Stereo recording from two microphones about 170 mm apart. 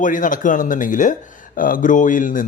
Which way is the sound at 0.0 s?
50° left (ahead or behind).